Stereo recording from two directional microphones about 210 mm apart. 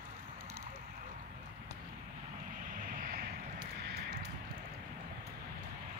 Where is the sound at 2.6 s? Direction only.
40° right (ahead or behind).